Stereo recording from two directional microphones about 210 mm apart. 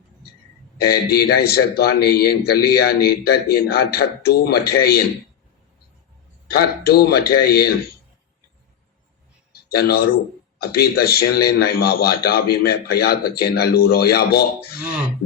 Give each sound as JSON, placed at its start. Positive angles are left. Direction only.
{"t": 0.9, "sound": "a man's voice", "side_deg": 50}
{"t": 6.5, "sound": "a man's voice", "side_deg": 50}
{"t": 9.5, "sound": "a man's voice", "side_deg": 50}